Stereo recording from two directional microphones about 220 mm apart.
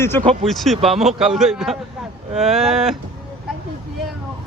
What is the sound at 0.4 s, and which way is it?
Speech, centre (ahead or behind).